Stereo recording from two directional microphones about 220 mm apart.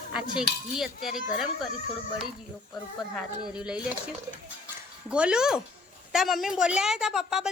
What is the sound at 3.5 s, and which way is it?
Speech, 5° right (ahead or behind).